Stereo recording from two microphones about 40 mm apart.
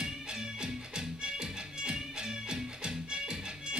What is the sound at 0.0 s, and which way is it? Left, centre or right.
Music, centre.